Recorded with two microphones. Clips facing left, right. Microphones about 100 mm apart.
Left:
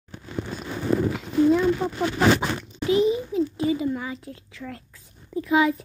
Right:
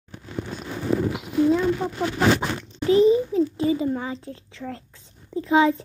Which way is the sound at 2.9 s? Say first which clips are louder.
Right 4 dB; 35° right (ahead or behind).